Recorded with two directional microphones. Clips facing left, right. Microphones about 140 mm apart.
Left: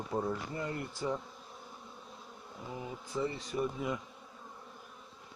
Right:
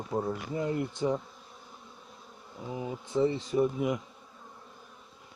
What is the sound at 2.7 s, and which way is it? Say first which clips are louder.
Speech: right 7 dB; 15° right (ahead or behind).